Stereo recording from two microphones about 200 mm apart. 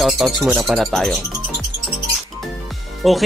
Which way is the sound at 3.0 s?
Centre (ahead or behind).